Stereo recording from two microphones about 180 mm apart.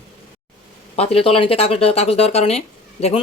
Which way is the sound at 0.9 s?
35° left (ahead or behind).